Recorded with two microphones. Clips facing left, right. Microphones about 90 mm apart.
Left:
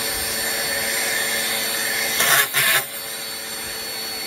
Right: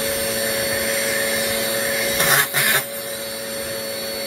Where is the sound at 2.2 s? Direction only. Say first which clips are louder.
Left 2 dB; 15° right (ahead or behind).